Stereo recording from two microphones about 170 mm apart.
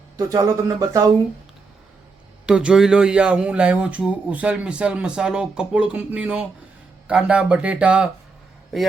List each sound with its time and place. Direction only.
0.2 s speech: 20° right (ahead or behind)
2.5 s speech: 5° right (ahead or behind)